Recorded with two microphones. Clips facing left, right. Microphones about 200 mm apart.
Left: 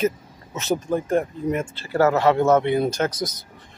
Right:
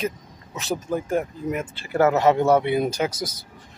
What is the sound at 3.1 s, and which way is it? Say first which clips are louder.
Speech: left 3 dB; 30° right (ahead or behind).